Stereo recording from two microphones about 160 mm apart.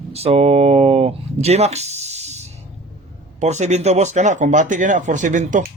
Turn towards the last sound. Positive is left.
turn(degrees=-50)  # may be behind; listen again after turning